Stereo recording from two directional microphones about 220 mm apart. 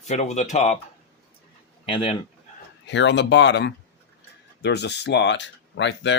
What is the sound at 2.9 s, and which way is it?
Speech, 55° left (ahead or behind).